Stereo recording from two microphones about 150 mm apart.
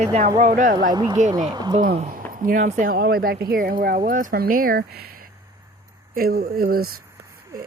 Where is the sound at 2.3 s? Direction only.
70° right (ahead or behind).